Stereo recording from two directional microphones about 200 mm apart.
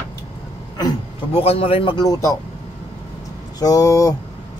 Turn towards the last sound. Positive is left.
turn(degrees=15)  # may be behind; listen again after turning